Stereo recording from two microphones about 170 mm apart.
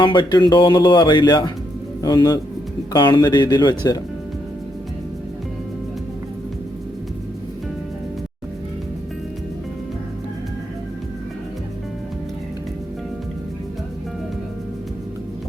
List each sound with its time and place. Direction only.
0.0 s a man's voice: 25° left (ahead or behind)